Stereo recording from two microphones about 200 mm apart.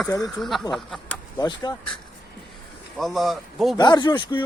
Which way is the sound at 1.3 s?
20° left (ahead or behind).